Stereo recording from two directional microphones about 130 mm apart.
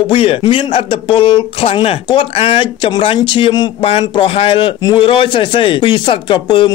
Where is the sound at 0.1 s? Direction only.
45° left (ahead or behind).